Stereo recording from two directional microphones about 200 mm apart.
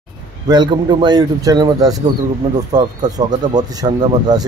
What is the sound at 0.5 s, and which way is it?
A man's voice, 20° right (ahead or behind).